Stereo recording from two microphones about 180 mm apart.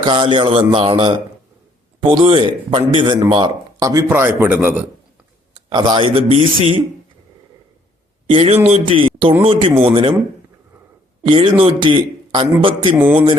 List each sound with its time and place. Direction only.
0.0 s speech: 25° right (ahead or behind)
3.8 s a man's voice: 20° right (ahead or behind)
5.5 s speech: 25° right (ahead or behind)
8.3 s a man's voice: 35° right (ahead or behind)
11.3 s speech: 25° right (ahead or behind)